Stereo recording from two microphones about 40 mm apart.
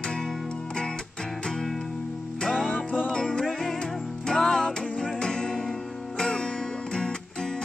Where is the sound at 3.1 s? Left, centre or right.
Left.